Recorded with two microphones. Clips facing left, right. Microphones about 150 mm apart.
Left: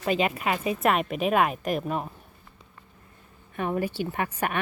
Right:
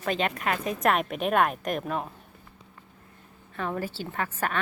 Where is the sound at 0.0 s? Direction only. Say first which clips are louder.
Left 2 dB; 5° left (ahead or behind).